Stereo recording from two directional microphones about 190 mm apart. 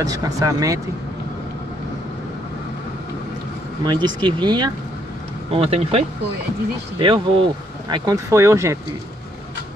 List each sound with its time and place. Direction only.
0.0 s speech: 20° right (ahead or behind)
3.8 s speech: 20° right (ahead or behind)